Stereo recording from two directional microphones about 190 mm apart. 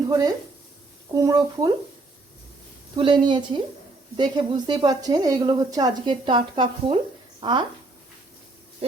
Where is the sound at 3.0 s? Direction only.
25° right (ahead or behind).